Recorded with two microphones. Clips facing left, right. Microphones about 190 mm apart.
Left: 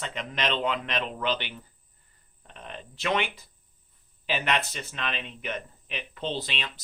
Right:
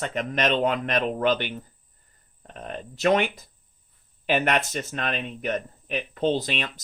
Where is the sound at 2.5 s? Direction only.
45° right (ahead or behind).